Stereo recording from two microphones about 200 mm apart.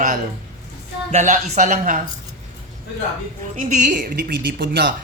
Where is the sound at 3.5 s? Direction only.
40° right (ahead or behind).